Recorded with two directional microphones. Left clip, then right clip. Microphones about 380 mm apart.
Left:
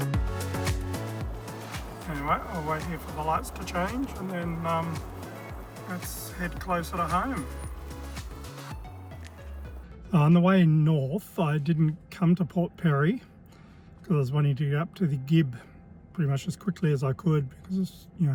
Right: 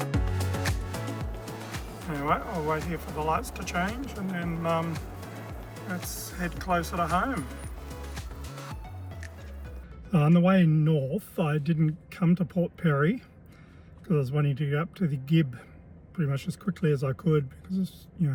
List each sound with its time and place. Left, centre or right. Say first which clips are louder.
0.1 s music: right 1 dB; centre
2.0 s speech: right 1 dB; centre
10.1 s speech: left 1 dB; centre